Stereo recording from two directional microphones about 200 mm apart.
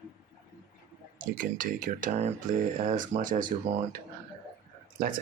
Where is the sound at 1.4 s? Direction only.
45° right (ahead or behind).